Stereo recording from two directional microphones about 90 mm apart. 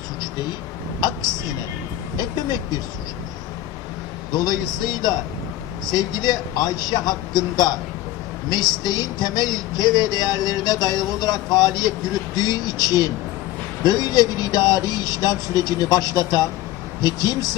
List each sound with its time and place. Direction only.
2.1 s speech: 50° left (ahead or behind)
4.3 s speech: 50° left (ahead or behind)
5.8 s speech: 50° left (ahead or behind)